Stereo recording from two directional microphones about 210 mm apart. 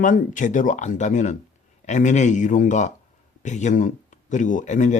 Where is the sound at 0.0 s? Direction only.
35° left (ahead or behind).